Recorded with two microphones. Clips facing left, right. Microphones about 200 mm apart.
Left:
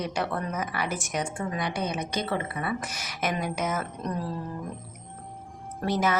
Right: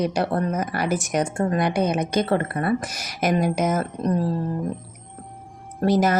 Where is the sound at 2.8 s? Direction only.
40° right (ahead or behind).